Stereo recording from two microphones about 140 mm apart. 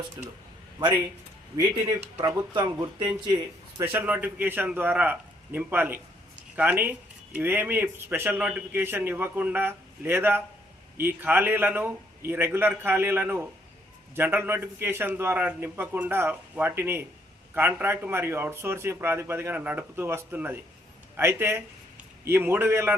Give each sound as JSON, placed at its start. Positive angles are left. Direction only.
{"t": 1.5, "sound": "speech", "side_deg": -25}
{"t": 3.8, "sound": "a man's voice", "side_deg": -15}